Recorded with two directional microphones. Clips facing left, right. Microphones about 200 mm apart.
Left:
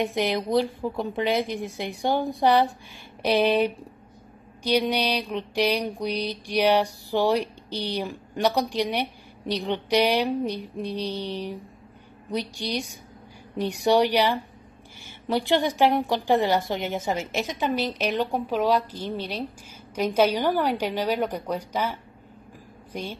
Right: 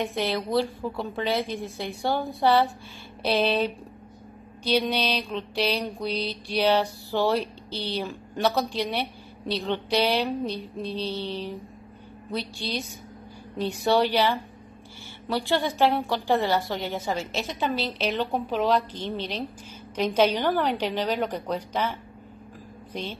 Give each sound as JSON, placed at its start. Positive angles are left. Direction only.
{"t": 0.0, "sound": "mantra", "side_deg": 15}
{"t": 22.9, "sound": "mantra", "side_deg": 10}